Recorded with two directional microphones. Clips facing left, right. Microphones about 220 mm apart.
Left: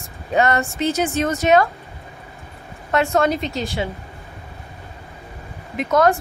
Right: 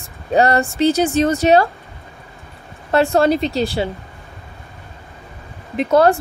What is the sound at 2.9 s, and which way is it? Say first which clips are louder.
Speech: right 4 dB; 30° right (ahead or behind).